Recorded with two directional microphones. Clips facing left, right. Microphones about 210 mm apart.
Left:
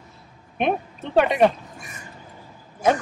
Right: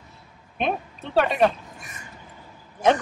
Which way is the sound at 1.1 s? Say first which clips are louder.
Left 3 dB; 15° left (ahead or behind).